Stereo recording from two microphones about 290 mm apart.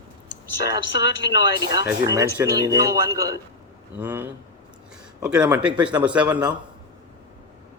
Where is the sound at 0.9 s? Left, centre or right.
Left.